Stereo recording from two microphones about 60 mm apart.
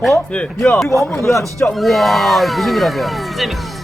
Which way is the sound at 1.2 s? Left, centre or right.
Left.